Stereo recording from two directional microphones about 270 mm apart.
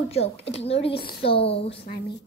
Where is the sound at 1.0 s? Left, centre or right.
Left.